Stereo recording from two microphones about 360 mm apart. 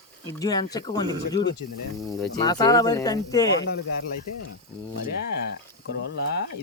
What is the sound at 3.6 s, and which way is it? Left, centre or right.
Speech, left.